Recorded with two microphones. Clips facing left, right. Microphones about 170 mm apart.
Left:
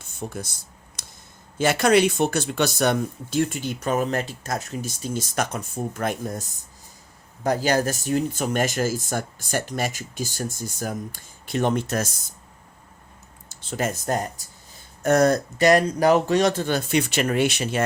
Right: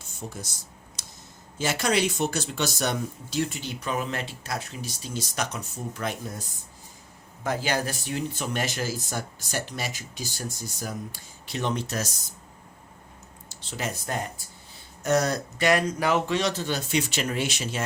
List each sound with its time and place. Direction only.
0.2 s speech: 55° left (ahead or behind)
1.0 s a sound: 55° left (ahead or behind)
1.5 s speech: 60° left (ahead or behind)
7.4 s speech: 40° left (ahead or behind)
13.5 s speech: 50° left (ahead or behind)